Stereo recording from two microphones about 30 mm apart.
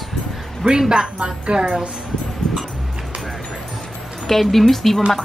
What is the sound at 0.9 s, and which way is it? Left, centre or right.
Speech, right.